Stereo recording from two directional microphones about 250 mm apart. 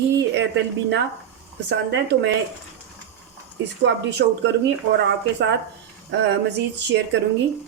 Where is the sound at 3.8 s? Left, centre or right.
Right.